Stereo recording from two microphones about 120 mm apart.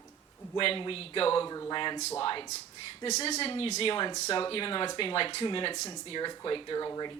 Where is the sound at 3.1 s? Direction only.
65° left (ahead or behind).